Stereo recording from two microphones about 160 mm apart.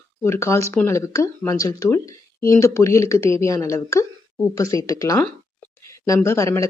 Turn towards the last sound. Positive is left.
turn(degrees=20)  # may be behind; listen again after turning